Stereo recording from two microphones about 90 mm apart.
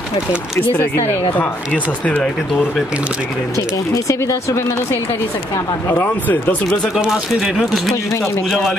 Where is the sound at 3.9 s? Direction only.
35° left (ahead or behind); by 6.9 s 15° left (ahead or behind).